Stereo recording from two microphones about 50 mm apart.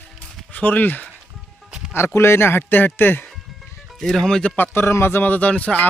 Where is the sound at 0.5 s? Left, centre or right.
Left.